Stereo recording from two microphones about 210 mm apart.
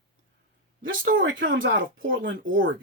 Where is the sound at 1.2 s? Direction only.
60° right (ahead or behind).